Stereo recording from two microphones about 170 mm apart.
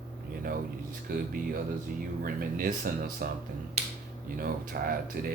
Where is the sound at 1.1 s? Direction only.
55° right (ahead or behind).